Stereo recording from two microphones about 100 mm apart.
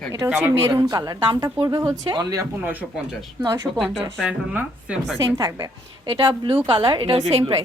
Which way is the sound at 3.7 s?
20° right (ahead or behind).